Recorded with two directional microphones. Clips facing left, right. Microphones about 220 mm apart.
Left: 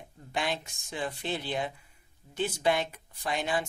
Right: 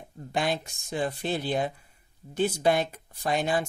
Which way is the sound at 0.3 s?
40° right (ahead or behind).